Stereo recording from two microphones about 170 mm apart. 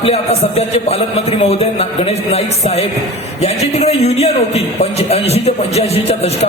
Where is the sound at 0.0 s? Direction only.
40° left (ahead or behind).